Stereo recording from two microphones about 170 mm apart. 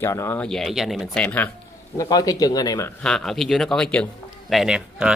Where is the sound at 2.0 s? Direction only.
20° left (ahead or behind).